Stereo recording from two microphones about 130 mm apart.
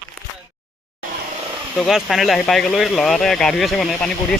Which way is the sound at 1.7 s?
Centre (ahead or behind).